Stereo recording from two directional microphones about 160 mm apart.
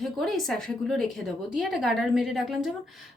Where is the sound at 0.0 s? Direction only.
Centre (ahead or behind).